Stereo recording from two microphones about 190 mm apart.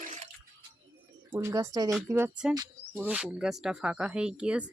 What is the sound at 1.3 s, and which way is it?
Speech, 15° right (ahead or behind).